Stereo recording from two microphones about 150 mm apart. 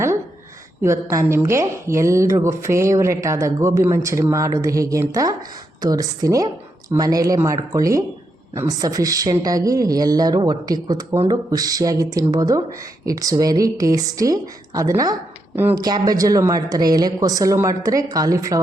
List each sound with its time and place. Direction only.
0.8 s a woman's voice: 15° right (ahead or behind)